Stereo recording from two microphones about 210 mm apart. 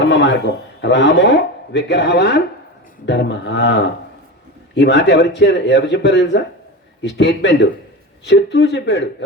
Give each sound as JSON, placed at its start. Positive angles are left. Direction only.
{"t": 0.0, "sound": "a man's voice", "side_deg": 55}